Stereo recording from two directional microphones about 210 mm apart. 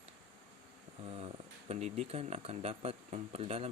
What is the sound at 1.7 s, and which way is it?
Speech, 30° right (ahead or behind).